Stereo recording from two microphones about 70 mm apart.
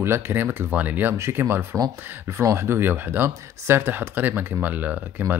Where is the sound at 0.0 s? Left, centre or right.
Right.